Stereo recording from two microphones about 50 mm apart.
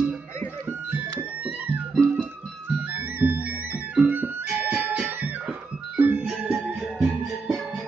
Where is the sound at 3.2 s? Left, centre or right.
Right.